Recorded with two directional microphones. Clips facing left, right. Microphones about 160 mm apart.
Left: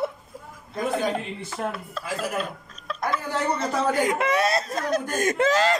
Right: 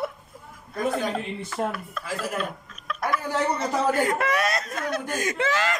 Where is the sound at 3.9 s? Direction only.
15° left (ahead or behind); by 5.7 s 40° left (ahead or behind).